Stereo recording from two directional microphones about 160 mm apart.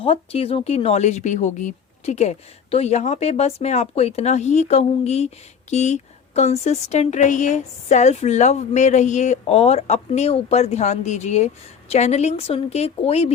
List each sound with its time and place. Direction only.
0.0 s a woman's voice: 35° left (ahead or behind)